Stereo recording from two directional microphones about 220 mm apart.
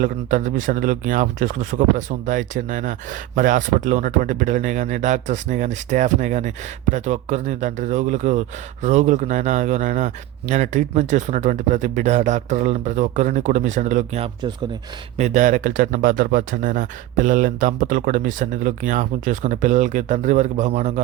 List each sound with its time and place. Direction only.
0.0 s speech: 35° right (ahead or behind)